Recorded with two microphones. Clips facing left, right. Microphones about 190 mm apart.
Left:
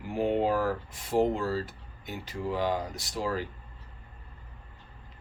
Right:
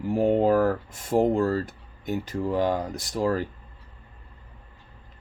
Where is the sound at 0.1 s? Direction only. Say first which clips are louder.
Right 6 dB; 45° right (ahead or behind).